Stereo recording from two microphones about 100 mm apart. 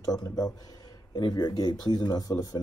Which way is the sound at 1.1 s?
45° left (ahead or behind).